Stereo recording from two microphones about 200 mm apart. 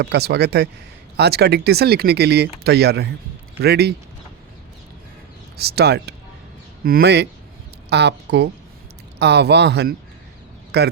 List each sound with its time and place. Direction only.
0.0 s speech: 55° right (ahead or behind)
5.5 s speech: 55° right (ahead or behind)